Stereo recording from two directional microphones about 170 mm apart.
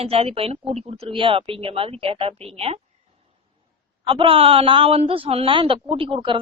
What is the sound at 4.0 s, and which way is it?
A man's voice, 30° right (ahead or behind).